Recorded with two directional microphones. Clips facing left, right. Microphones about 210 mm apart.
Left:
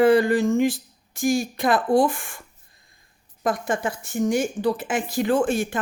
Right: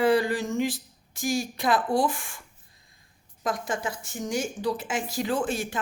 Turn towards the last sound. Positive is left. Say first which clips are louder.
# left 6 dB
turn(degrees=55)  # may be behind; listen again after turning